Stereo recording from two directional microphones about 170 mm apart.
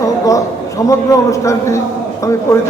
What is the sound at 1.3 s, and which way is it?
Speech, 20° left (ahead or behind).